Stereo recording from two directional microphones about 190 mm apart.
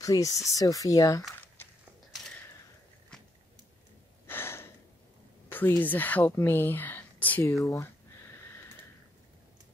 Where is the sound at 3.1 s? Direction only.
5° left (ahead or behind).